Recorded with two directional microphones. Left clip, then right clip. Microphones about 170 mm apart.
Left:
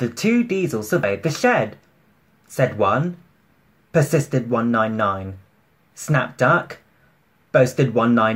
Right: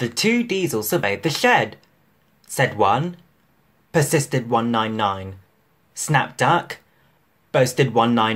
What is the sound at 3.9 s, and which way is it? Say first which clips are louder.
Speech: left 1 dB; 40° right (ahead or behind).